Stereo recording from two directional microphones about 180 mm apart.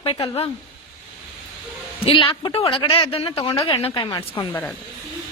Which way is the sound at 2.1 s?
30° left (ahead or behind).